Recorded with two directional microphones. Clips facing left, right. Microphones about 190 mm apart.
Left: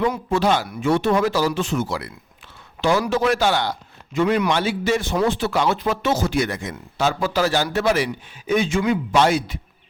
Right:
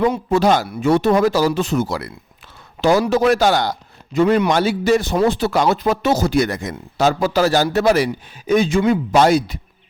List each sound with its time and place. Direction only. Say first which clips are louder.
0.3 s a man's voice: right 4 dB; 40° right (ahead or behind)
3.1 s a man's voice: right 4 dB; 40° right (ahead or behind)